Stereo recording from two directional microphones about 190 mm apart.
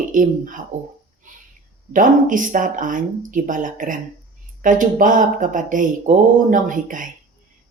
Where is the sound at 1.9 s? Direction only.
45° right (ahead or behind).